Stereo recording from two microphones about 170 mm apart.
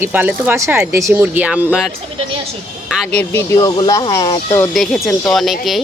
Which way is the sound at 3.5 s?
25° left (ahead or behind).